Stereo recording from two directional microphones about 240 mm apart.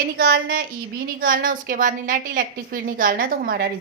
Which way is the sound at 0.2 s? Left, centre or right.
Right.